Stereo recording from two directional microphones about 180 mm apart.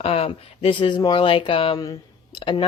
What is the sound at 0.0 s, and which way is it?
Speech, 35° left (ahead or behind).